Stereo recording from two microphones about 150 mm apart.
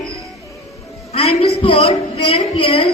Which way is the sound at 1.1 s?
40° left (ahead or behind).